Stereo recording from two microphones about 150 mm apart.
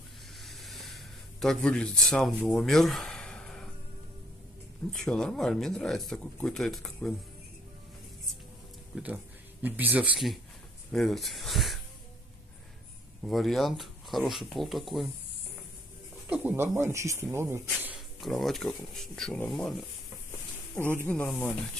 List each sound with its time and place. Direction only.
0.4 s vehicle: centre (ahead or behind)
1.4 s speech: 5° left (ahead or behind)
4.9 s speech: 5° left (ahead or behind)
8.9 s speech: 5° right (ahead or behind)
13.2 s speech: centre (ahead or behind)
16.3 s speech: 15° right (ahead or behind)
17.9 s speech: centre (ahead or behind)
20.9 s speech: 15° left (ahead or behind)